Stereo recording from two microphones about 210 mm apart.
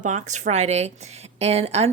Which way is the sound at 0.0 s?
35° right (ahead or behind).